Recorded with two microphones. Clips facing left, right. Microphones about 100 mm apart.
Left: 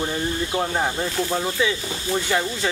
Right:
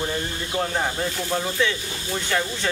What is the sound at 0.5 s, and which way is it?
Speech, 10° left (ahead or behind).